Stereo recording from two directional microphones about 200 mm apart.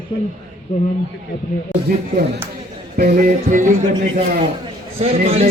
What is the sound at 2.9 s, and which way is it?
Music, 50° right (ahead or behind).